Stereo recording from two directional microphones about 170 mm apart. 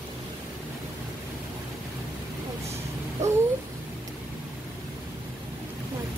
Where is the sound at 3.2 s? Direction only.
40° right (ahead or behind).